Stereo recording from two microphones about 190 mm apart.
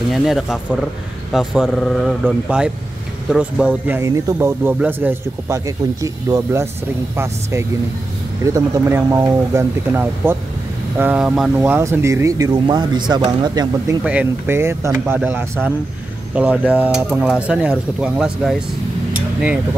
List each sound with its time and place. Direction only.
0.1 s a man's voice: centre (ahead or behind); by 6.7 s 15° right (ahead or behind)
8.5 s a man's voice: 15° right (ahead or behind)
14.0 s a man's voice: 10° right (ahead or behind)